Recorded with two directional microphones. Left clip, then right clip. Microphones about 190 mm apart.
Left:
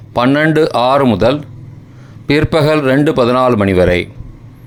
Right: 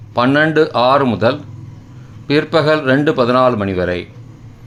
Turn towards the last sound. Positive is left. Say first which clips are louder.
# left 7 dB
turn(degrees=25)  # may be behind; listen again after turning